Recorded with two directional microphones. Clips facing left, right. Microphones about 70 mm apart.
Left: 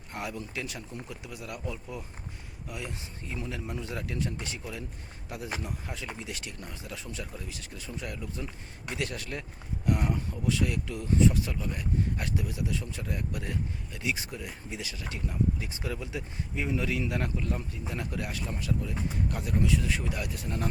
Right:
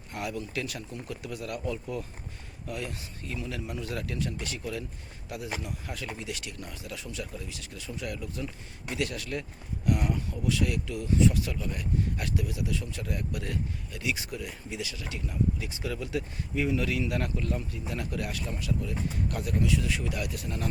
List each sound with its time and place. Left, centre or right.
0.1 s speech: left
3.3 s speech: left